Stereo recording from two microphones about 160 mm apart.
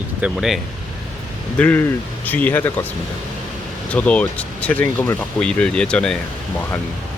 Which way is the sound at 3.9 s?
10° left (ahead or behind).